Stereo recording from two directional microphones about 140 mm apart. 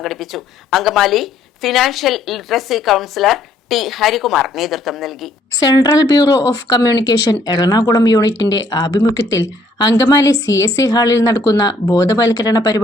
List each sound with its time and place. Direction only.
0.0 s a woman's voice: centre (ahead or behind)
5.6 s speech: 30° left (ahead or behind)